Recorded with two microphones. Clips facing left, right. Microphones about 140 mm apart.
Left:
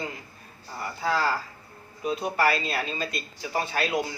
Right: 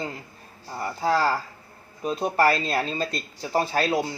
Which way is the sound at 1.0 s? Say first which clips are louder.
Right 3 dB; 35° right (ahead or behind).